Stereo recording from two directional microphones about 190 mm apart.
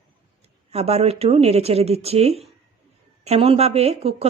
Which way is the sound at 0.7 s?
35° right (ahead or behind).